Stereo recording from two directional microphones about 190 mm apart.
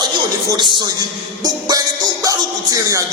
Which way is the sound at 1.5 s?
20° right (ahead or behind).